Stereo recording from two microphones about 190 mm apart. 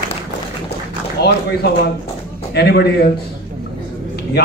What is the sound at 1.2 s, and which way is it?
A man's voice, 60° left (ahead or behind).